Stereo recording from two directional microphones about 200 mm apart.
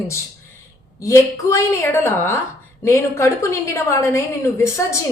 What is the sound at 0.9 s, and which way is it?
A woman's voice, 15° left (ahead or behind).